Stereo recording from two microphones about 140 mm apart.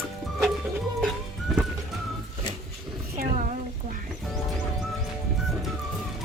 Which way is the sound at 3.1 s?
70° right (ahead or behind).